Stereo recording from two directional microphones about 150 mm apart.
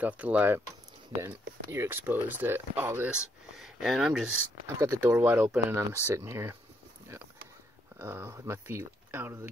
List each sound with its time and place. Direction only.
0.0 s speech: 10° right (ahead or behind)
4.7 s speech: 20° right (ahead or behind)
8.0 s speech: 15° right (ahead or behind)